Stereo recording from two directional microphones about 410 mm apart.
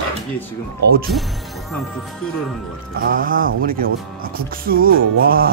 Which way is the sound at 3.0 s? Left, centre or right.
Centre.